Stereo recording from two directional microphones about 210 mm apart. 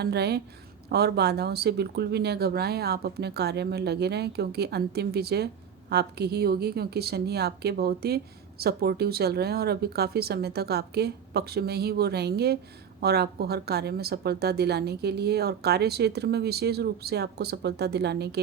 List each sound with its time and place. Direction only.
0.0 s a woman's voice: 50° right (ahead or behind)